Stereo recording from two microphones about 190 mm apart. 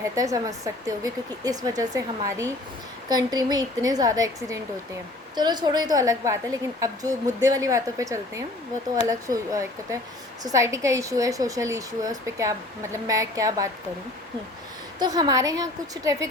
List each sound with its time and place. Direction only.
0.0 s a woman's voice: 15° right (ahead or behind)
14.9 s speech: 20° right (ahead or behind)